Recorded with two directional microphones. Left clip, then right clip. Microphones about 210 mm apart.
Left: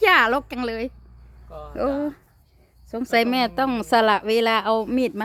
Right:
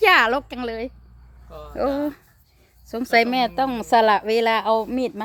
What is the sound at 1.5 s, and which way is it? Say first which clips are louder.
Cricket: left 1 dB; 5° right (ahead or behind).